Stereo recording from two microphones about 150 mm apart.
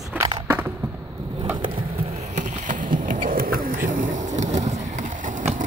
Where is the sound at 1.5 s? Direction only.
35° right (ahead or behind).